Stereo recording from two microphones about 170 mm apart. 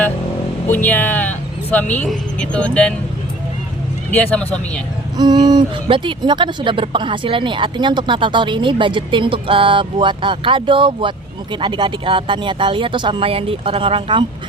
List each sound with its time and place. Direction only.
0.7 s speech: 10° left (ahead or behind)
4.1 s speech: 10° left (ahead or behind)
5.1 s speech: 25° right (ahead or behind)